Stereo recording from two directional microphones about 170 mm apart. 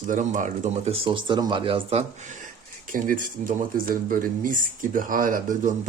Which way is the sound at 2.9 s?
50° right (ahead or behind).